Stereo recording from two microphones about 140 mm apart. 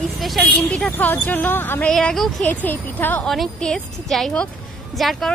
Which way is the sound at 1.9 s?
Centre (ahead or behind).